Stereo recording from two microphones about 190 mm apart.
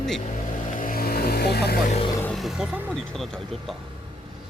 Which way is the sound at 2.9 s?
5° left (ahead or behind).